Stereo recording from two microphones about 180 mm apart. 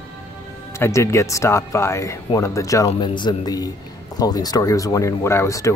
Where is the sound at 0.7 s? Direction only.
15° left (ahead or behind).